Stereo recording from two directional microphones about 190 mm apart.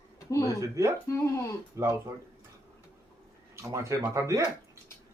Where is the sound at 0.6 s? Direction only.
15° right (ahead or behind).